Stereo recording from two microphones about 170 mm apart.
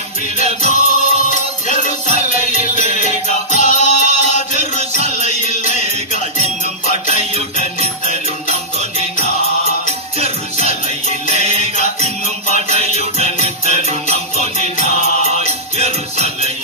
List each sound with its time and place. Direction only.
0.4 s music: 50° left (ahead or behind)
11.1 s music: 50° left (ahead or behind)
14.8 s mantra: 45° left (ahead or behind)
15.3 s music: 40° right (ahead or behind)